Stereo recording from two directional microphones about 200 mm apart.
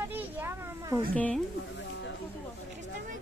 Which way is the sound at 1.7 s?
65° left (ahead or behind).